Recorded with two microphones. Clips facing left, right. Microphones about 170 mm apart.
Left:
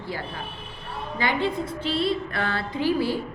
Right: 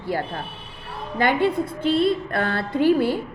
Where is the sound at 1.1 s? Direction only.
55° right (ahead or behind).